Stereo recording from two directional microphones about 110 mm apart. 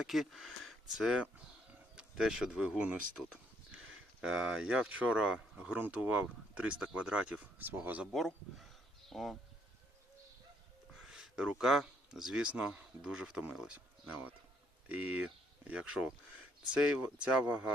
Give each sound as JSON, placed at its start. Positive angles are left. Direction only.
{"t": 0.0, "sound": "speech", "side_deg": 0}
{"t": 4.2, "sound": "speech", "side_deg": -5}
{"t": 9.0, "sound": "speech", "side_deg": 0}
{"t": 11.0, "sound": "speech", "side_deg": -5}